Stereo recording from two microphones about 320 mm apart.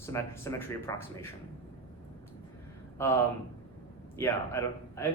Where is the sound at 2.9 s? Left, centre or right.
Centre.